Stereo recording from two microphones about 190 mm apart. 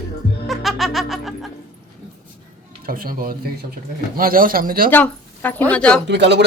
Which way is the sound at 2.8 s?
50° right (ahead or behind).